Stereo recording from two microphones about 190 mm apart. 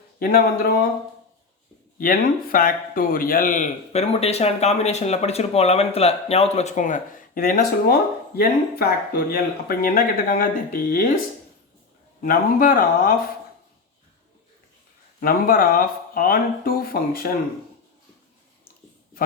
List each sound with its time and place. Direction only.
0.2 s speech: 50° left (ahead or behind)
2.0 s a man's voice: 45° left (ahead or behind)
12.2 s speech: 45° left (ahead or behind)
15.2 s speech: 50° left (ahead or behind)